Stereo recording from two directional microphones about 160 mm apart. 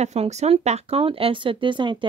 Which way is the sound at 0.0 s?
45° right (ahead or behind).